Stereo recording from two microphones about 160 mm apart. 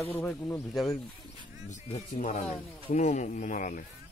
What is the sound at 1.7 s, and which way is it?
Speech, 50° left (ahead or behind).